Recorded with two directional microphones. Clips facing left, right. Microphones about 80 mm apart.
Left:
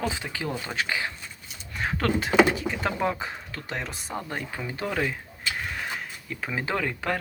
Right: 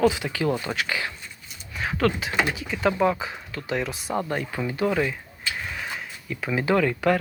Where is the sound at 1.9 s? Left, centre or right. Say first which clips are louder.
Left 3 dB; left.